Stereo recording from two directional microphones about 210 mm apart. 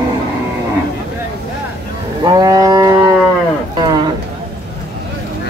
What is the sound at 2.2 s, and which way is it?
Livestock, 20° right (ahead or behind).